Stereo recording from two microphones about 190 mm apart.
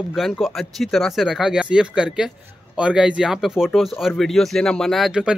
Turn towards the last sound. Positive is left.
turn(degrees=-5)  # may be behind; listen again after turning